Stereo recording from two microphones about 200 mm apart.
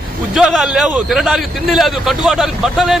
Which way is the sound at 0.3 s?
Centre (ahead or behind).